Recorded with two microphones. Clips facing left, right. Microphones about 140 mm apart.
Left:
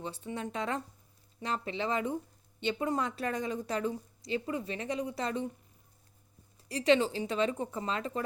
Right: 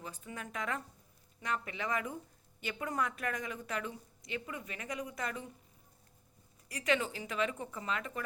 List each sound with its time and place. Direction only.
0.0 s a woman's voice: 30° left (ahead or behind)
6.7 s speech: 30° left (ahead or behind)